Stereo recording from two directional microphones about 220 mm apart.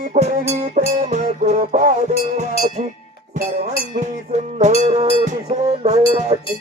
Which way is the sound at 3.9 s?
35° right (ahead or behind).